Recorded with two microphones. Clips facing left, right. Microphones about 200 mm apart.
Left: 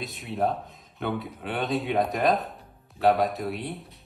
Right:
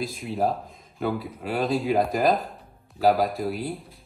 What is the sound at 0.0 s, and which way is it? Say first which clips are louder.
Speech: right 2 dB; centre (ahead or behind).